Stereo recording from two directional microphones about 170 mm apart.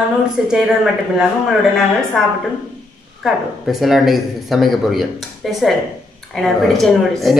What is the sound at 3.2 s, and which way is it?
Speech, centre (ahead or behind).